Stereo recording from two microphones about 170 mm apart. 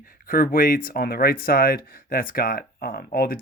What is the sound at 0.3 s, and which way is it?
Speech, 55° left (ahead or behind).